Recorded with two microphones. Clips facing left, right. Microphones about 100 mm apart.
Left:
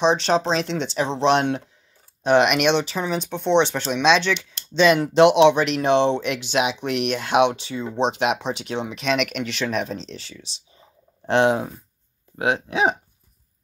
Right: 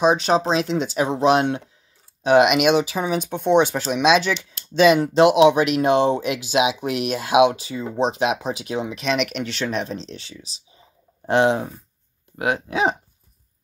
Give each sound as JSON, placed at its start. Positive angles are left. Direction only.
{"t": 0.0, "sound": "speech", "side_deg": -5}
{"t": 12.4, "sound": "speech", "side_deg": 20}
{"t": 12.6, "sound": "speech", "side_deg": 0}